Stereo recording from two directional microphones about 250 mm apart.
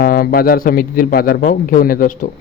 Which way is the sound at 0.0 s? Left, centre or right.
Left.